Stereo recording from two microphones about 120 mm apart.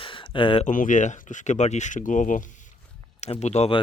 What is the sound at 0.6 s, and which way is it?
Speech, 90° left.